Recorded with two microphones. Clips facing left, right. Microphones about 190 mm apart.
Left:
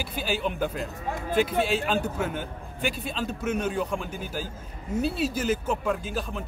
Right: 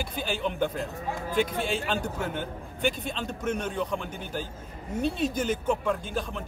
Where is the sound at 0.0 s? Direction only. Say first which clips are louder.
Left 1 dB; 5° left (ahead or behind).